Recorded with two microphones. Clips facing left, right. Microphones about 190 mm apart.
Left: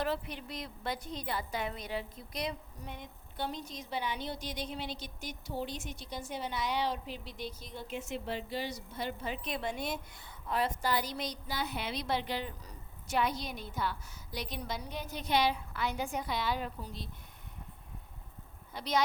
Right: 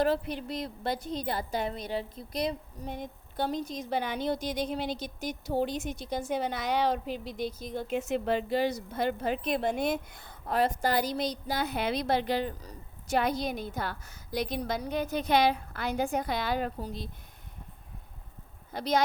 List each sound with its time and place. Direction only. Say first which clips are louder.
0.0 s a woman's voice: right 7 dB; 35° right (ahead or behind)
18.7 s a woman's voice: right 4 dB; 45° right (ahead or behind)